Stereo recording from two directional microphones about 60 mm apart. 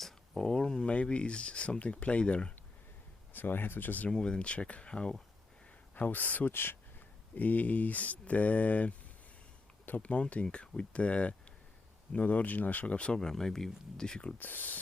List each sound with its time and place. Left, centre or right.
0.0 s speech: centre
3.3 s speech: left
4.1 s speech: centre
5.9 s speech: left; by 14.3 s centre
14.3 s speech: left